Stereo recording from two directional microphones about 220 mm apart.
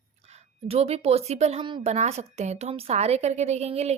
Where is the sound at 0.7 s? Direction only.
30° right (ahead or behind).